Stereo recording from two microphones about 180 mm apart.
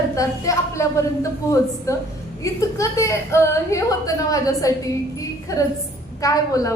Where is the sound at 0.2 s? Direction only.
15° left (ahead or behind).